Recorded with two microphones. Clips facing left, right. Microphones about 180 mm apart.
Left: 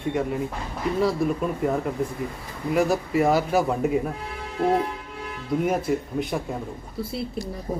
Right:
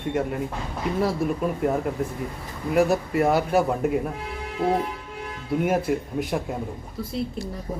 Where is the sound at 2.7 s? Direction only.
Centre (ahead or behind).